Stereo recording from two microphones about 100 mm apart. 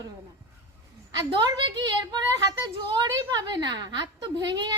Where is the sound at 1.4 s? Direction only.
50° right (ahead or behind).